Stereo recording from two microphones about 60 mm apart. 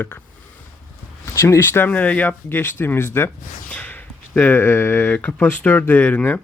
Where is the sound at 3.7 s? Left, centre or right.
Left.